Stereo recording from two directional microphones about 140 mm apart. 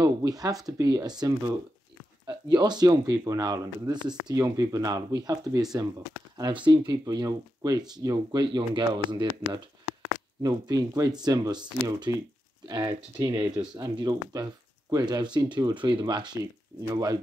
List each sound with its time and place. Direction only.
0.0 s speech: 25° right (ahead or behind)
2.2 s speech: 30° right (ahead or behind)